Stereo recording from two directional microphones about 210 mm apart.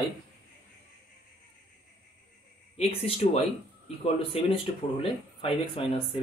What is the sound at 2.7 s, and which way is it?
Speech, 25° left (ahead or behind).